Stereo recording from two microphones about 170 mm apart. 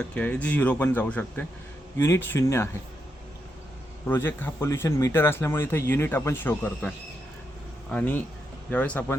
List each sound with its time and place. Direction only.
0.0 s speech: 10° left (ahead or behind)
4.0 s speech: 15° left (ahead or behind)